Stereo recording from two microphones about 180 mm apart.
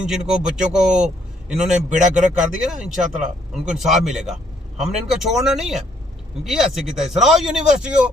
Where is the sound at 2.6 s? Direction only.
5° right (ahead or behind).